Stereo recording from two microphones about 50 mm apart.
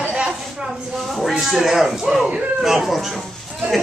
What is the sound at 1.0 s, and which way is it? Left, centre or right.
A man's voice, centre.